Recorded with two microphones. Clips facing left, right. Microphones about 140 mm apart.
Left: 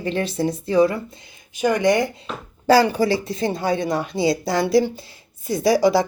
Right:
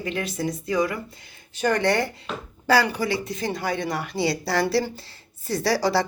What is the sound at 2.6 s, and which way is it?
A woman's voice, 30° left (ahead or behind).